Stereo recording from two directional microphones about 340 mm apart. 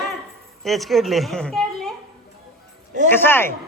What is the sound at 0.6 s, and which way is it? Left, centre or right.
A man's voice, centre.